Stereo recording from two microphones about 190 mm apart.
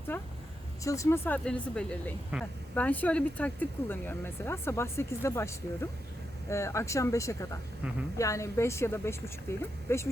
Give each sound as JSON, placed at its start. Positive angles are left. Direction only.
{"t": 0.1, "sound": "speech", "side_deg": 10}